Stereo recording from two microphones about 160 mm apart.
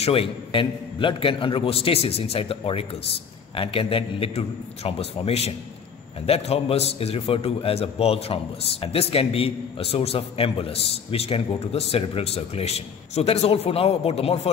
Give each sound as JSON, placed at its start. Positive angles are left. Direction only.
{"t": 0.0, "sound": "a man's voice", "side_deg": 35}